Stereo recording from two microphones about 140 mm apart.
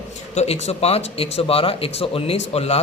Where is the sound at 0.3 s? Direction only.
50° left (ahead or behind).